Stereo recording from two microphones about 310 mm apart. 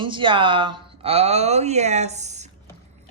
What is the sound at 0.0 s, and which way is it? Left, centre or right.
Speech, centre.